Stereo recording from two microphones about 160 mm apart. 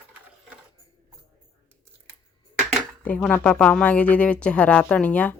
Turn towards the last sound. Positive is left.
turn(degrees=10)  # may be behind; listen again after turning